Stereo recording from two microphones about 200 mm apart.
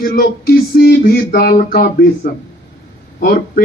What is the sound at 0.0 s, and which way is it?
A man's voice, 50° left (ahead or behind).